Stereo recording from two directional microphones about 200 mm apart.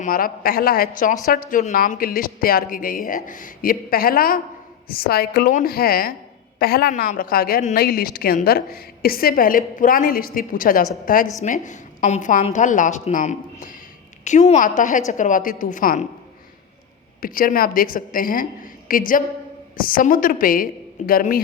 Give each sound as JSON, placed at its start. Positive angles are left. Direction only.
{"t": 0.0, "sound": "a woman's voice", "side_deg": 45}
{"t": 17.2, "sound": "a woman's voice", "side_deg": 45}